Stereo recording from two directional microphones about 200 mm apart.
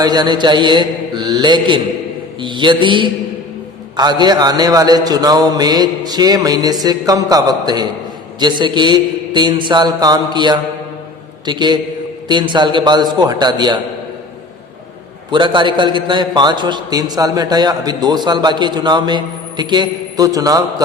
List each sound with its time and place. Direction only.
0.0 s a man's voice: 20° right (ahead or behind)
15.3 s a man's voice: 25° right (ahead or behind)